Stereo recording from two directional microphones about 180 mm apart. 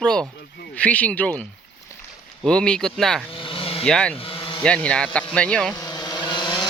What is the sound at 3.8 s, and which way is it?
Speech, 5° left (ahead or behind).